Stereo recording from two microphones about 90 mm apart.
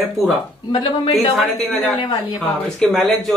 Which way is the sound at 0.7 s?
50° left (ahead or behind).